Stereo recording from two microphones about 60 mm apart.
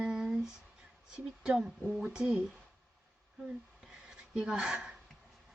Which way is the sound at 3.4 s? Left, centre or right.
Centre.